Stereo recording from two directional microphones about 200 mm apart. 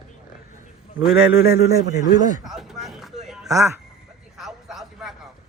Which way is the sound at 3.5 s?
15° right (ahead or behind).